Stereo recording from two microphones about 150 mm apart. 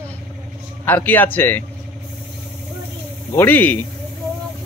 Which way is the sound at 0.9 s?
10° left (ahead or behind).